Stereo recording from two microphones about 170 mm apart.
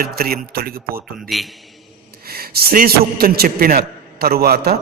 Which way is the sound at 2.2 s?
65° right (ahead or behind).